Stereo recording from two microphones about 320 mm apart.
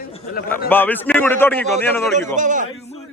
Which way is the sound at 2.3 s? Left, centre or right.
Right.